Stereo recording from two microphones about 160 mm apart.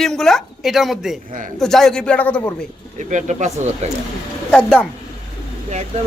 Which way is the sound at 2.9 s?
50° right (ahead or behind).